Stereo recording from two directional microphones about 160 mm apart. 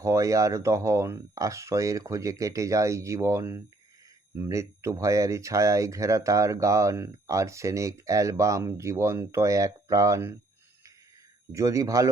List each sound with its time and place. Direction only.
0.0 s speech: 20° right (ahead or behind)
11.5 s speech: 20° right (ahead or behind)